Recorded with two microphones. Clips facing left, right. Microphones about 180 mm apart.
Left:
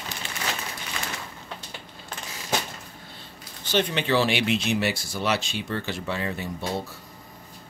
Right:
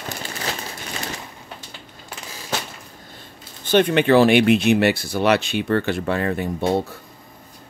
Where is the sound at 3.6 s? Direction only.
55° right (ahead or behind).